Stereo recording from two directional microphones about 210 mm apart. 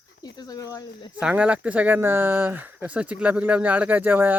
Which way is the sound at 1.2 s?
5° right (ahead or behind).